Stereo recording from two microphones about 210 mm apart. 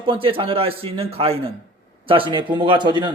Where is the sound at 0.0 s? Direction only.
25° right (ahead or behind).